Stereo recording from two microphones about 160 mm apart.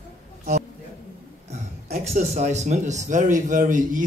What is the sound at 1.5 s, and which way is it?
Speech, 45° right (ahead or behind).